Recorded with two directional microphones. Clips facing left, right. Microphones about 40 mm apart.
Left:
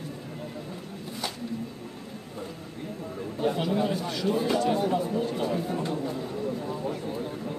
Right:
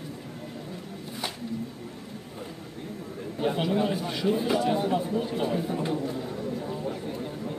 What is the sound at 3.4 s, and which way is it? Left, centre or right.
Speech, centre.